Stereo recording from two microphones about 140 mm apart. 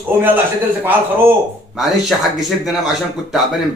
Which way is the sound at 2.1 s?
5° left (ahead or behind).